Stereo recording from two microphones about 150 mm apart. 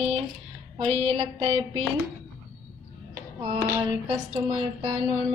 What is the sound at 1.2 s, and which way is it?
Speech, 40° right (ahead or behind).